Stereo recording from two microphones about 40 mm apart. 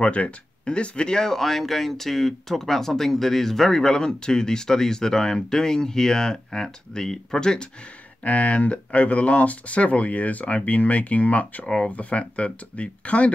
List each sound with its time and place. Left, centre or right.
0.0 s speech: left
8.2 s speech: left
11.6 s speech: left
11.9 s speech: left